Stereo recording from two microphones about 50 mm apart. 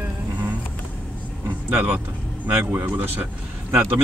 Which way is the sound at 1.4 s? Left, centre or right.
Right.